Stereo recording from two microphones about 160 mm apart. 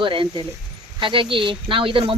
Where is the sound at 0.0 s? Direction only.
30° right (ahead or behind).